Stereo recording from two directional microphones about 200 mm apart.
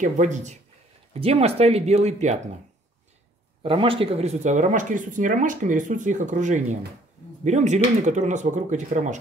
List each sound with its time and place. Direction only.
0.0 s speech: 35° right (ahead or behind)
3.6 s speech: 25° right (ahead or behind)